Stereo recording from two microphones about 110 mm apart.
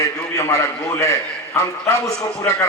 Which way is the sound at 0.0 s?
30° left (ahead or behind).